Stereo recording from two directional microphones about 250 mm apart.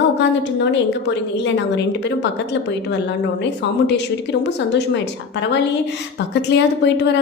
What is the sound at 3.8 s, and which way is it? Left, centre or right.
Speech, left.